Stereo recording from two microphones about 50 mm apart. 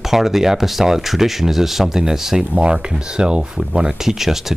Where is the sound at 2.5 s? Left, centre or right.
Right.